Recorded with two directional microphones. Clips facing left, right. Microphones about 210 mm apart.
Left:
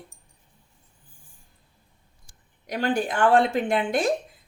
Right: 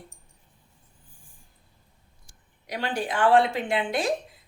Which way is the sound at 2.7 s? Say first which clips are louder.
Left 4 dB; 45° left (ahead or behind).